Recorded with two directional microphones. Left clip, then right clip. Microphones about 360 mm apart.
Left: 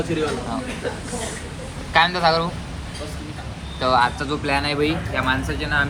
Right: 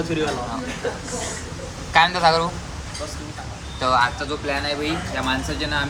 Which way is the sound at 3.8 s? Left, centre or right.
Centre.